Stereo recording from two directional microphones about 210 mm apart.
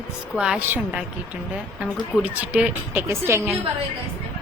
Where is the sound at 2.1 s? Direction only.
5° right (ahead or behind).